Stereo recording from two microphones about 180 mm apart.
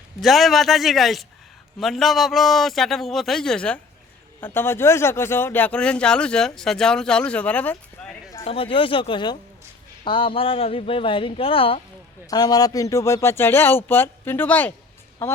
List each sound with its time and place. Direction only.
0.2 s a man's voice: centre (ahead or behind)
8.4 s a man's voice: 30° left (ahead or behind); by 14.7 s 10° left (ahead or behind)